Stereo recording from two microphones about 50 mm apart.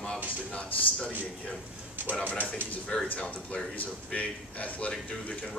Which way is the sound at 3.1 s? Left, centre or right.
Left.